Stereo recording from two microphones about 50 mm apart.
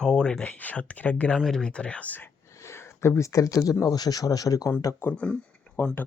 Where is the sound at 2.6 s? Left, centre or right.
Left.